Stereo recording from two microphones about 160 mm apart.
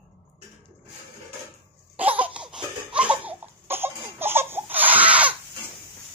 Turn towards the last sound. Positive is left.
turn(degrees=-10)  # may be behind; listen again after turning